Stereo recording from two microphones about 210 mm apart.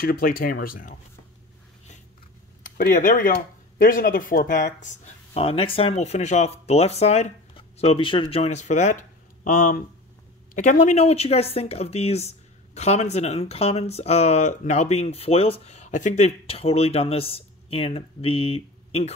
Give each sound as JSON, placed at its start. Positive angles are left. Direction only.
{"t": 0.0, "sound": "speech", "side_deg": 45}
{"t": 2.6, "sound": "speech", "side_deg": 40}